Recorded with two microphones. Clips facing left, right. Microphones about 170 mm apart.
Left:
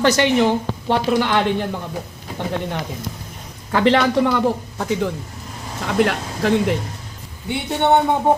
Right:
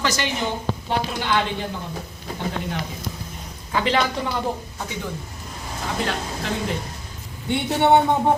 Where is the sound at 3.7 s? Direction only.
65° left (ahead or behind).